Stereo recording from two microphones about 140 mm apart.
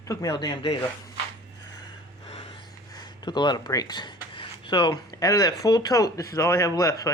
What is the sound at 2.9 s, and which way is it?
Speech, 30° left (ahead or behind).